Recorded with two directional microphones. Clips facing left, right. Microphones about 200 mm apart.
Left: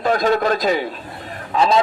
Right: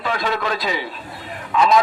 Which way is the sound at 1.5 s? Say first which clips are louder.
Even; 30° left (ahead or behind).